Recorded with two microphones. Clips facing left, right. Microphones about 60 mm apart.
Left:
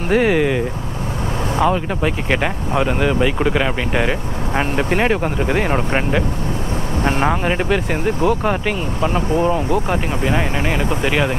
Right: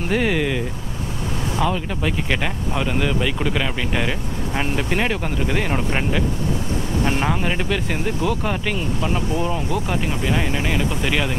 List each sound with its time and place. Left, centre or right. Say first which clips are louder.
0.1 s speech: left 6 dB; centre